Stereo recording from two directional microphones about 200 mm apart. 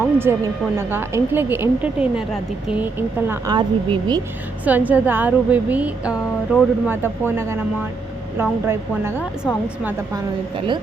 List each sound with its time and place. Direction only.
0.0 s a woman's voice: 10° right (ahead or behind)
3.5 s speech: 25° right (ahead or behind)
4.6 s a woman's voice: 10° right (ahead or behind)